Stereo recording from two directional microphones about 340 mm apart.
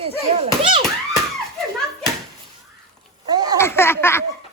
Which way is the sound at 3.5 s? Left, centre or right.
Centre.